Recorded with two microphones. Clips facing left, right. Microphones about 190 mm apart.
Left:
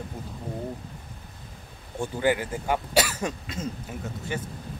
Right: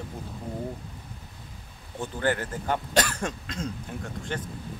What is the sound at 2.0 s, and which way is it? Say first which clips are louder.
Speech: left 3 dB; 10° left (ahead or behind).